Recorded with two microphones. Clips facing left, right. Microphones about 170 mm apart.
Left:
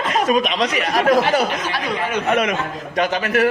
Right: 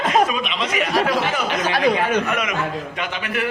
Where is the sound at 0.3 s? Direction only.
45° left (ahead or behind).